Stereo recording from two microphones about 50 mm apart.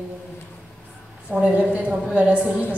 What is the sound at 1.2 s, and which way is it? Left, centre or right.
A woman's voice, right.